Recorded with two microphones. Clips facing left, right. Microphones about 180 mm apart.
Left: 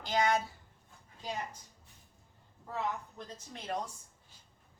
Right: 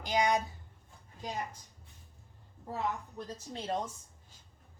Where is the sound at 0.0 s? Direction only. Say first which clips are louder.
Right 1 dB; 15° right (ahead or behind).